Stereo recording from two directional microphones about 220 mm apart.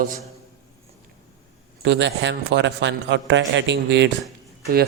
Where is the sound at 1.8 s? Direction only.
55° right (ahead or behind).